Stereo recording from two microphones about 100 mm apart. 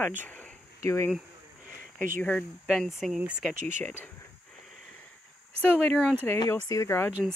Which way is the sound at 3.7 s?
20° left (ahead or behind).